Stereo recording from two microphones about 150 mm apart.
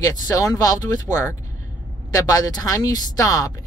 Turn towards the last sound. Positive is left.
turn(degrees=25)  # may be behind; listen again after turning